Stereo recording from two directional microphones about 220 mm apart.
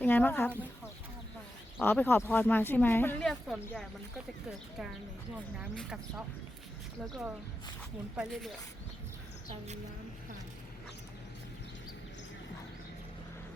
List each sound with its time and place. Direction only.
0.0 s speech: 10° left (ahead or behind)
1.8 s speech: 10° left (ahead or behind)
5.5 s speech: 5° right (ahead or behind)